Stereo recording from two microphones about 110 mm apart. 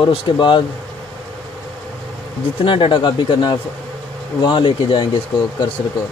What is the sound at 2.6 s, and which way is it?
Speech, 50° left (ahead or behind).